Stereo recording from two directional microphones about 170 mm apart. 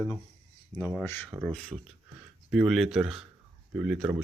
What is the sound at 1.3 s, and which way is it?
Speech, 10° right (ahead or behind).